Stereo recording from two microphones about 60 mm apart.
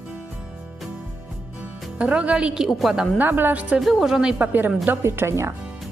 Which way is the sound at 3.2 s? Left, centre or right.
Right.